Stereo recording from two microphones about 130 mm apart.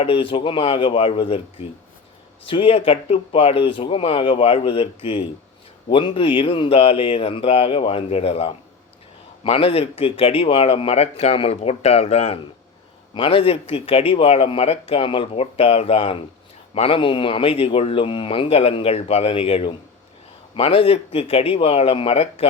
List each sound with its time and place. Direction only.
0.0 s speech: 45° left (ahead or behind)
2.5 s speech: 45° left (ahead or behind)